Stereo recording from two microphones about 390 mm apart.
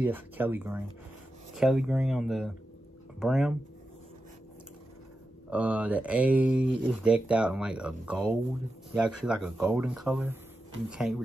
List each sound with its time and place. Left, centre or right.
0.0 s speech: centre
5.5 s speech: centre